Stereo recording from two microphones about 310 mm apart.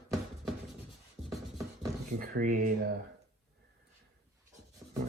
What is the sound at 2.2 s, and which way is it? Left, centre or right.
Speech, right.